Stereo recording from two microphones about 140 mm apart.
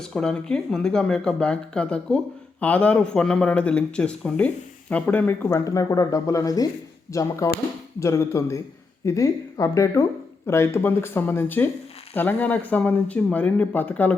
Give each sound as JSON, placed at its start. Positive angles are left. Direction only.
{"t": 0.0, "sound": "speech", "side_deg": 5}
{"t": 5.5, "sound": "speech", "side_deg": 25}